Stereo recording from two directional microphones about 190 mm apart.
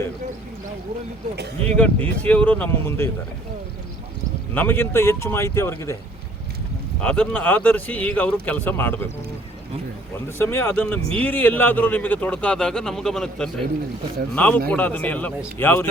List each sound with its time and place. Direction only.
1.6 s a man's voice: 5° left (ahead or behind)
4.5 s a man's voice: 10° left (ahead or behind)
7.0 s a man's voice: 5° left (ahead or behind)
10.3 s a man's voice: 10° left (ahead or behind)